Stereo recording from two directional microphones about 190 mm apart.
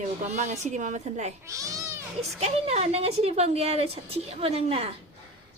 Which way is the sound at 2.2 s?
35° right (ahead or behind).